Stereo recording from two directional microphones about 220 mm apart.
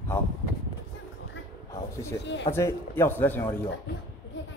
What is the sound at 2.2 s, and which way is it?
Speech, 55° left (ahead or behind).